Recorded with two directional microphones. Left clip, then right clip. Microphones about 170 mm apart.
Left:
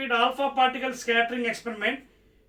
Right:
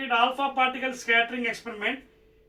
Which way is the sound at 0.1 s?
15° right (ahead or behind).